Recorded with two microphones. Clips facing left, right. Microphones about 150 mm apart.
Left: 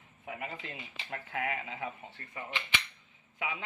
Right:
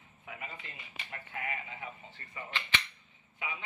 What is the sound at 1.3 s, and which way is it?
Speech, 80° left.